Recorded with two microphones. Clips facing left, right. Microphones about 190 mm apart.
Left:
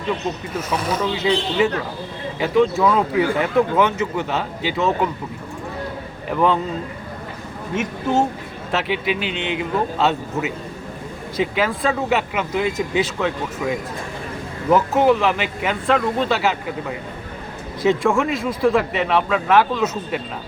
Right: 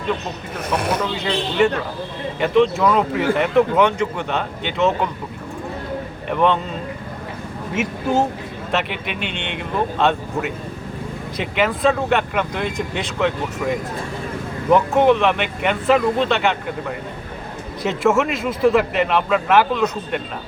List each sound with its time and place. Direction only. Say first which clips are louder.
0.7 s speech: right 2 dB; 65° right (ahead or behind)
1.1 s speech: left 2 dB; centre (ahead or behind)
6.3 s speech: even; 5° left (ahead or behind)
8.7 s speech: left 3 dB; centre (ahead or behind)
17.8 s speech: even; 5° right (ahead or behind)